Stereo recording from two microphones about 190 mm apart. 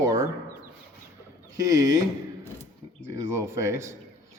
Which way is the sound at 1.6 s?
15° right (ahead or behind).